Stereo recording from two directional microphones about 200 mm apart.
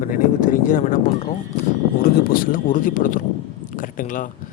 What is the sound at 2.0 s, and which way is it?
Speech, 45° left (ahead or behind).